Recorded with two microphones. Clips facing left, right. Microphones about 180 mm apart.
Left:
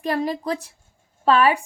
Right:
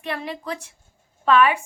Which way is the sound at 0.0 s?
40° left (ahead or behind).